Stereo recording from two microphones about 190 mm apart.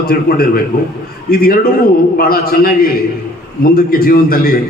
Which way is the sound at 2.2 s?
50° left (ahead or behind).